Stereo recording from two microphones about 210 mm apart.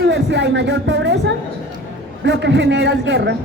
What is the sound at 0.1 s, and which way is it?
Speech, 55° right (ahead or behind).